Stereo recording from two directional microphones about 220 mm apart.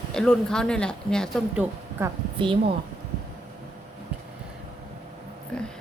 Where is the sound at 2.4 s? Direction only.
20° right (ahead or behind).